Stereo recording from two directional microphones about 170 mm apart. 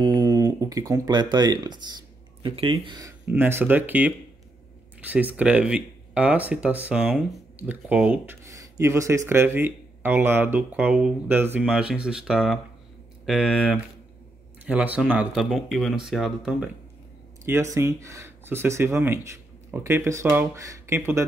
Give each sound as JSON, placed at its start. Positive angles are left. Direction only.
{"t": 0.0, "sound": "speech", "side_deg": -25}
{"t": 17.7, "sound": "speech", "side_deg": -15}